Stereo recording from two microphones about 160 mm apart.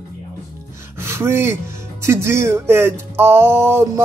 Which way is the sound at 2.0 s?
15° right (ahead or behind).